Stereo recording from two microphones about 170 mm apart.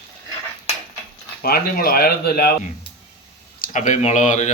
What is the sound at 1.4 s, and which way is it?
Speech, 60° left (ahead or behind).